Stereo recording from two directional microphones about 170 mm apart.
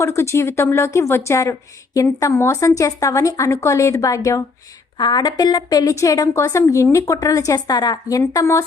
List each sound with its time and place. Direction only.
0.0 s a woman's voice: 15° left (ahead or behind)